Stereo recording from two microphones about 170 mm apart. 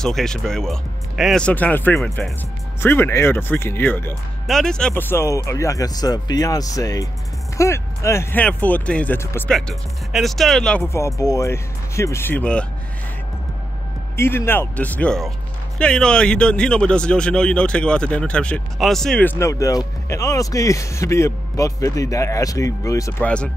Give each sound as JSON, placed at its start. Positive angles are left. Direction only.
{"t": 0.0, "sound": "speech", "side_deg": 5}
{"t": 2.8, "sound": "speech", "side_deg": 15}
{"t": 9.5, "sound": "speech", "side_deg": 0}
{"t": 10.9, "sound": "speech", "side_deg": 15}
{"t": 14.1, "sound": "speech", "side_deg": 15}
{"t": 23.2, "sound": "speech", "side_deg": 5}